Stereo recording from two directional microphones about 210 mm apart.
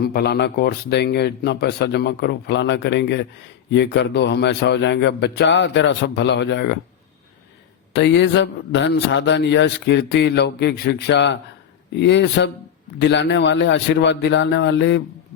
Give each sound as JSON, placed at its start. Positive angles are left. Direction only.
{"t": 0.0, "sound": "a man's voice", "side_deg": 50}
{"t": 7.9, "sound": "a man's voice", "side_deg": 55}